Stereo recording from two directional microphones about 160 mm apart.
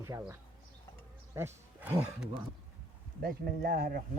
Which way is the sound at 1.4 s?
15° right (ahead or behind).